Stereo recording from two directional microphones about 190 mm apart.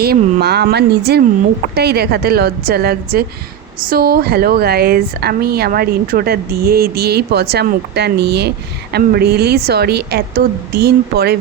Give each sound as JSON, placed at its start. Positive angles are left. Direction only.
{"t": 0.0, "sound": "a woman's voice", "side_deg": -55}